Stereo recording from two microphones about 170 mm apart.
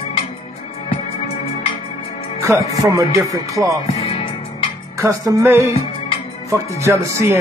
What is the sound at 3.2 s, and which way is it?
Speech, 20° right (ahead or behind).